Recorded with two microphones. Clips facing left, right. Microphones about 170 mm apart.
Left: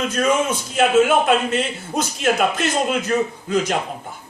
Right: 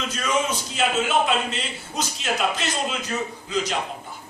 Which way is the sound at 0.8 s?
55° left (ahead or behind).